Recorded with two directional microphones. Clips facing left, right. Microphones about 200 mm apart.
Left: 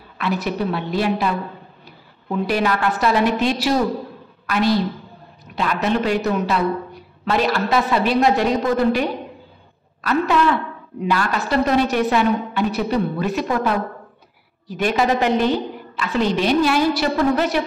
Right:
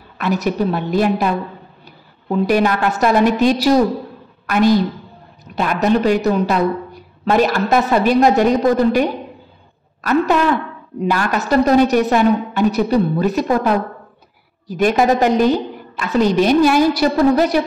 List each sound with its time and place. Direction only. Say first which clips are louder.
0.2 s a woman's voice: right 4 dB; 40° right (ahead or behind)